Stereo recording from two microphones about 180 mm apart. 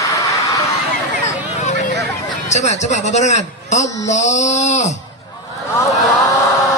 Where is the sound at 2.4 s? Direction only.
40° left (ahead or behind).